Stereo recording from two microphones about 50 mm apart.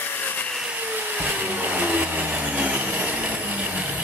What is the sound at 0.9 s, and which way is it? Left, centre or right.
Vehicle, right.